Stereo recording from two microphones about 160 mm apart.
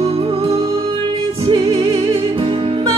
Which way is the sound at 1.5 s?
25° right (ahead or behind).